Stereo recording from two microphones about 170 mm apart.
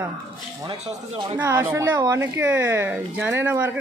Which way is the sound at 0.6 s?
40° right (ahead or behind).